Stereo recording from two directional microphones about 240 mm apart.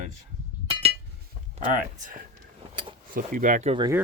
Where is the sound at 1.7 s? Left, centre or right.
Right.